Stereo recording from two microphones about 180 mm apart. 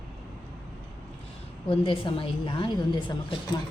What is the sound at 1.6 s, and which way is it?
A woman's voice, 30° left (ahead or behind).